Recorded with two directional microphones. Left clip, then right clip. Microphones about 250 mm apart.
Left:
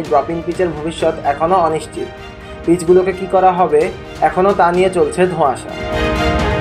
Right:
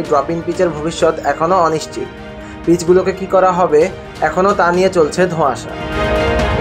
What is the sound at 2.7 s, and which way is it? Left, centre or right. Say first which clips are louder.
Speech: even; right.